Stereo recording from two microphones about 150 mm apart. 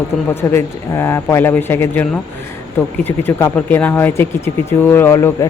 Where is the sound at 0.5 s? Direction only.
15° left (ahead or behind).